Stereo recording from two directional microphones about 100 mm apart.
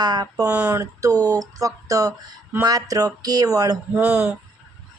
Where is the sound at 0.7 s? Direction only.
35° right (ahead or behind).